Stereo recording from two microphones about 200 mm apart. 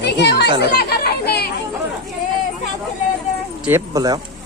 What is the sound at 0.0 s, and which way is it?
Chatter, 55° left (ahead or behind).